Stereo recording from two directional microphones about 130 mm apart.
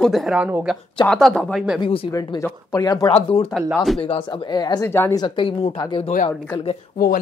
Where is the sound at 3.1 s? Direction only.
45° left (ahead or behind); by 4.9 s 30° left (ahead or behind).